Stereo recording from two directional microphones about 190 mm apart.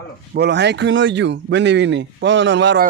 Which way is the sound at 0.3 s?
60° right (ahead or behind).